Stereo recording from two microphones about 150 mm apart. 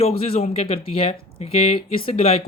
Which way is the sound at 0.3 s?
45° left (ahead or behind).